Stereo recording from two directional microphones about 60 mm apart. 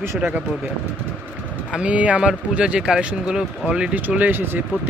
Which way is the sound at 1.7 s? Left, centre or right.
Centre.